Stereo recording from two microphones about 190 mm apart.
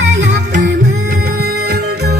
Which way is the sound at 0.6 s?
50° right (ahead or behind).